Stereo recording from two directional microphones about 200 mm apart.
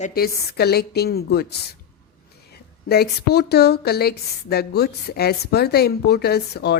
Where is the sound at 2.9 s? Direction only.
55° left (ahead or behind).